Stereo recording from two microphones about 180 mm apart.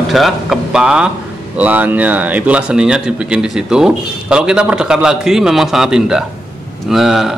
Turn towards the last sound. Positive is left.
turn(degrees=0)  # may be behind; listen again after turning